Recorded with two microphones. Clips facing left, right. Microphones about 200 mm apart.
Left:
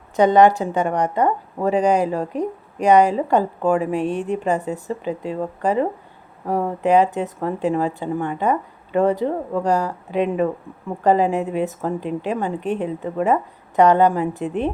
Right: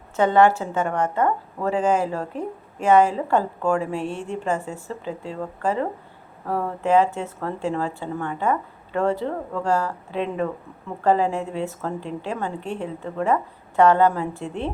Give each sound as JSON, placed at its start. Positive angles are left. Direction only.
{"t": 0.2, "sound": "speech", "side_deg": 15}